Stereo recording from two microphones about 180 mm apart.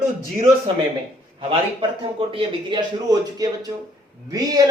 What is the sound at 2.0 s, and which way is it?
Speech, 30° right (ahead or behind).